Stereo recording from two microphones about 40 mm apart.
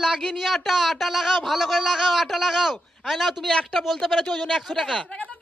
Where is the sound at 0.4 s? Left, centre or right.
Centre.